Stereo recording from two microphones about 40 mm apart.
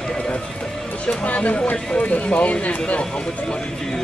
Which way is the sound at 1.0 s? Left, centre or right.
Left.